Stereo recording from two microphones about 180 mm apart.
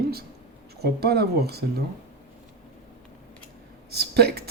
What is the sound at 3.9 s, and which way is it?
Speech, 65° right (ahead or behind).